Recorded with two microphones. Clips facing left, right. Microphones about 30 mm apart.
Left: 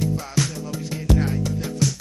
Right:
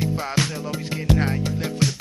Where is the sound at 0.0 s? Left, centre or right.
Right.